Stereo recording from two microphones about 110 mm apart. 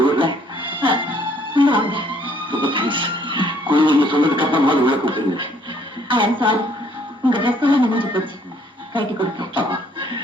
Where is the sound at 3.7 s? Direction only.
50° right (ahead or behind).